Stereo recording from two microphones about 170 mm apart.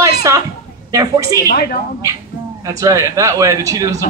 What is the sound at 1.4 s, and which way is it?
Speech, 60° left (ahead or behind).